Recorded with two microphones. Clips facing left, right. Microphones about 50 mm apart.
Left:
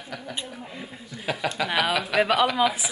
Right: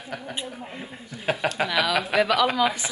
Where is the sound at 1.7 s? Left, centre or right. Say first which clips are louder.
Left 1 dB; left.